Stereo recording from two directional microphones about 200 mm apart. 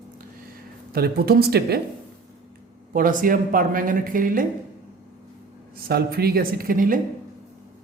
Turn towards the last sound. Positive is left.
turn(degrees=-45)  # may be behind; listen again after turning